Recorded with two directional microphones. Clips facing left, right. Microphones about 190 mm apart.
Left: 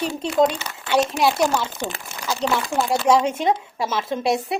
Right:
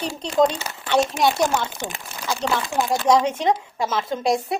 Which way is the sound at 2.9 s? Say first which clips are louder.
Even; 10° left (ahead or behind).